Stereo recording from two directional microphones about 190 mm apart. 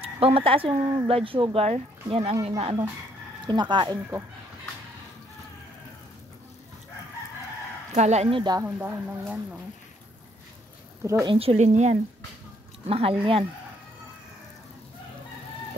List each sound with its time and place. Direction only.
0.0 s speech: 30° right (ahead or behind)
7.9 s speech: 35° right (ahead or behind)
8.5 s speech: 10° right (ahead or behind)
11.2 s speech: 30° right (ahead or behind)